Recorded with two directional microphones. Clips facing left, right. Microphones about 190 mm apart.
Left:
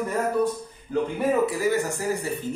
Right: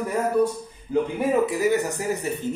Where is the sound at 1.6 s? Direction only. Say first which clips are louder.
Right 2 dB; 20° right (ahead or behind).